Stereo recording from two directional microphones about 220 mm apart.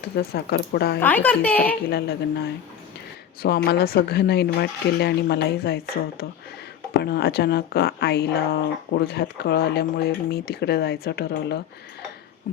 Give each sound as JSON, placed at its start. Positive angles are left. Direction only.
{"t": 0.2, "sound": "speech", "side_deg": 45}
{"t": 1.0, "sound": "speech", "side_deg": 5}
{"t": 1.9, "sound": "speech", "side_deg": 45}
{"t": 3.4, "sound": "speech", "side_deg": 45}